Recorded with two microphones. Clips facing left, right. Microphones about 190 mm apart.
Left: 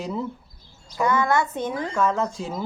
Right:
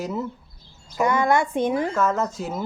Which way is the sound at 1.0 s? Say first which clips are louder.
Right 1 dB; 25° right (ahead or behind).